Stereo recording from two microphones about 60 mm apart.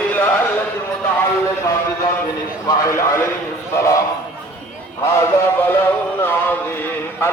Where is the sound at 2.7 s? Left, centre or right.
Left.